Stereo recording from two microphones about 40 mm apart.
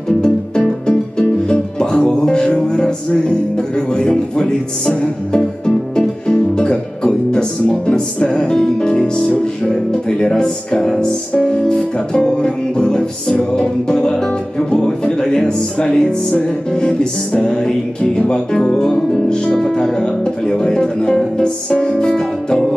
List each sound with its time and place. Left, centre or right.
0.2 s music: left
18.2 s speech: left
19.1 s music: left
19.7 s speech: centre